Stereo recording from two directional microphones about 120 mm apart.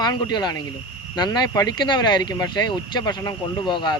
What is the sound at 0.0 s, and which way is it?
Speech, 35° left (ahead or behind).